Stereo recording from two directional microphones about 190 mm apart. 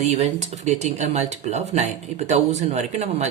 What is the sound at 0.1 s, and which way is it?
Speech, 35° right (ahead or behind).